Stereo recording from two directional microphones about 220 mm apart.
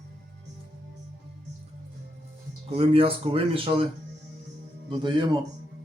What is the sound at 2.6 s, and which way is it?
Speech, 25° right (ahead or behind).